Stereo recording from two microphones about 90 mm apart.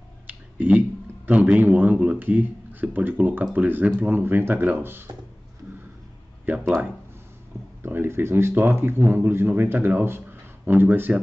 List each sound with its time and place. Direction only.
0.3 s speech: 20° right (ahead or behind)
6.5 s speech: 20° right (ahead or behind)
7.8 s speech: 25° right (ahead or behind)